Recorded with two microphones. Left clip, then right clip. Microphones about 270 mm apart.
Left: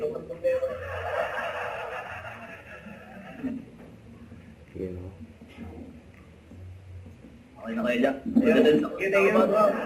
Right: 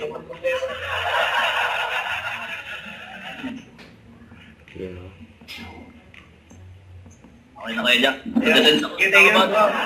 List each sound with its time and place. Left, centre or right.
0.0 s chuckle: centre
7.6 s a man's voice: centre